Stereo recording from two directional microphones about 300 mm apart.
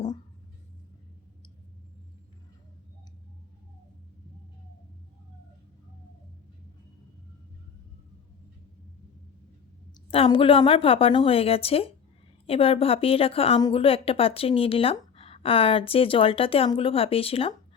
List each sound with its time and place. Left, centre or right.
10.1 s a woman's voice: centre